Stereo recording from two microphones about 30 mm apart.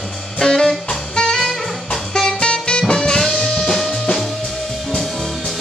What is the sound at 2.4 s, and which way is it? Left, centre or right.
Music, left.